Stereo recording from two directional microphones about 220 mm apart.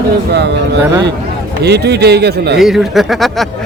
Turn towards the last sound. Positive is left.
turn(degrees=0)  # may be behind; listen again after turning